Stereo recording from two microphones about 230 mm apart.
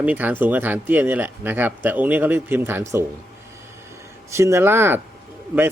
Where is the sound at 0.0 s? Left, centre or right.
Centre.